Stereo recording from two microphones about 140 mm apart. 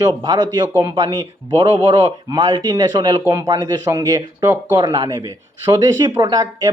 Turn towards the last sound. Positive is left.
turn(degrees=-25)  # may be behind; listen again after turning